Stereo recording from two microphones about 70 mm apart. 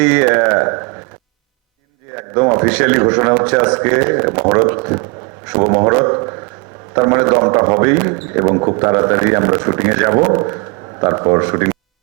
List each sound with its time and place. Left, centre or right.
0.0 s a man's voice: centre
2.1 s a sound: right
2.6 s a man's voice: centre